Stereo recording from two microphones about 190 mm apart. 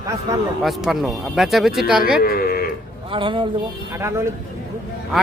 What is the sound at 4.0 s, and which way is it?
Speech, 15° right (ahead or behind).